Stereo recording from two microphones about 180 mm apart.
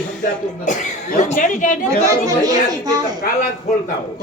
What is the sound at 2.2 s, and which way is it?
Speech, 20° right (ahead or behind).